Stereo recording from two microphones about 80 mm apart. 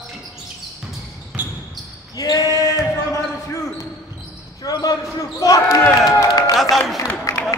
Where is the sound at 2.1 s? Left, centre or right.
Left.